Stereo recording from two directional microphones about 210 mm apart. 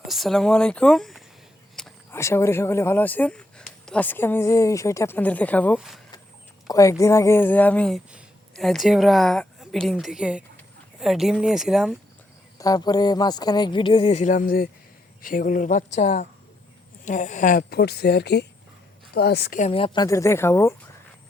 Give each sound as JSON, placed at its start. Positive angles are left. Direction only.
{"t": 0.1, "sound": "speech", "side_deg": 0}
{"t": 5.7, "sound": "speech", "side_deg": -5}
{"t": 6.7, "sound": "speech", "side_deg": 15}
{"t": 12.5, "sound": "a man's voice", "side_deg": 15}